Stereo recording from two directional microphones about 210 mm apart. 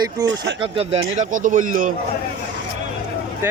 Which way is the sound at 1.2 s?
40° right (ahead or behind).